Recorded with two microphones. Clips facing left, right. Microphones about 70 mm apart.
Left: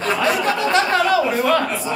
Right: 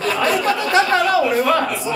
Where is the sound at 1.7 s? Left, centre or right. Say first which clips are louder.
Right 1 dB; left.